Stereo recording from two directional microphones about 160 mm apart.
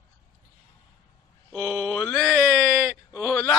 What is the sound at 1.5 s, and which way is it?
Speech, centre (ahead or behind).